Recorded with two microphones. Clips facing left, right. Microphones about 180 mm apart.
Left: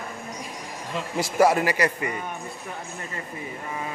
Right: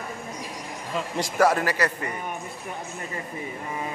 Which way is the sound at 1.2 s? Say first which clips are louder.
Left 2 dB; 10° left (ahead or behind).